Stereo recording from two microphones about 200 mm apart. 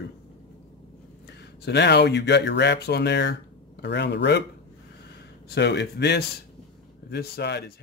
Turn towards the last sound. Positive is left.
turn(degrees=55)  # may be behind; listen again after turning